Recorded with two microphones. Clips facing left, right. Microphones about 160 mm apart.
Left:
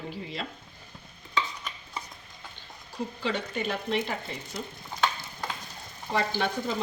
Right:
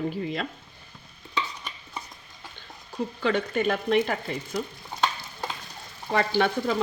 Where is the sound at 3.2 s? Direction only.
55° right (ahead or behind).